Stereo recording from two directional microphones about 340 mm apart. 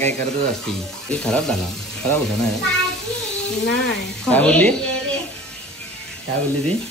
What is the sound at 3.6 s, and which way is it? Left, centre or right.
Speech, left.